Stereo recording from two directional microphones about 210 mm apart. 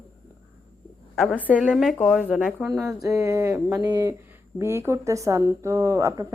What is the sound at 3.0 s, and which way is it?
A woman's voice, 15° right (ahead or behind).